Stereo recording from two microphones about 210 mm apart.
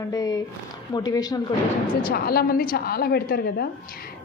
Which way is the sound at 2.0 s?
45° left (ahead or behind).